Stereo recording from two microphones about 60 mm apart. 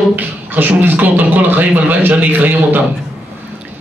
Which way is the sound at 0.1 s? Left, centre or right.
Right.